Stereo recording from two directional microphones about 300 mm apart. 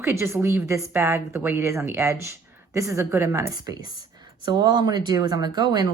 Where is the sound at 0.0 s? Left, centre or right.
Centre.